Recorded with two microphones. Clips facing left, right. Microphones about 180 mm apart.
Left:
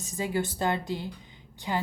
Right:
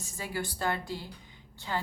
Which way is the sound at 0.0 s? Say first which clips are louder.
Left 7 dB; 20° left (ahead or behind).